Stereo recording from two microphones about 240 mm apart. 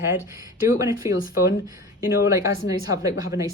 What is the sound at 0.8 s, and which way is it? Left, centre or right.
Speech, centre.